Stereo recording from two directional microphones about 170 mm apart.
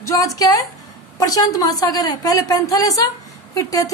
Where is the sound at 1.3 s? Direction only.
20° left (ahead or behind).